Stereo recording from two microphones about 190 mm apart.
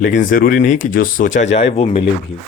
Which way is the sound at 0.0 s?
45° left (ahead or behind).